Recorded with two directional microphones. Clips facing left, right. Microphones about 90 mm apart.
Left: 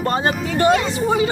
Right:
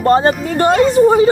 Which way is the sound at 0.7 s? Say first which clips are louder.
Right 7 dB; centre (ahead or behind).